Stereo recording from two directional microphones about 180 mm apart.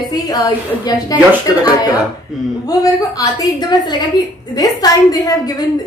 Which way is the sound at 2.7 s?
20° left (ahead or behind).